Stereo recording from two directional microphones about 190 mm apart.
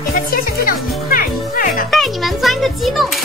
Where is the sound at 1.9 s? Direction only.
Centre (ahead or behind).